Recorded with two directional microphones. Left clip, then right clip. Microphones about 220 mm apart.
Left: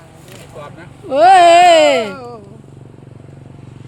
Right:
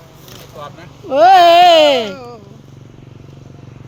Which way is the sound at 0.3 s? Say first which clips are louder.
Right 1 dB; centre (ahead or behind).